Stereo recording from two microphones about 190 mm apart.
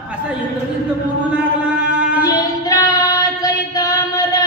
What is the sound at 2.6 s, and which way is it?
Singing, 20° left (ahead or behind).